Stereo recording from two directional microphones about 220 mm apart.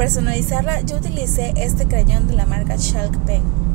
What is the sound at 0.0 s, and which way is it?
Speech, 15° left (ahead or behind).